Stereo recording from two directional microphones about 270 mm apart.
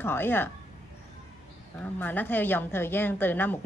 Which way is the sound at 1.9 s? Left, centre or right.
Centre.